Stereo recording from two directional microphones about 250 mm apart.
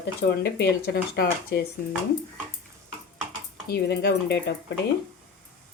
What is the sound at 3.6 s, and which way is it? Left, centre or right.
Speech, left.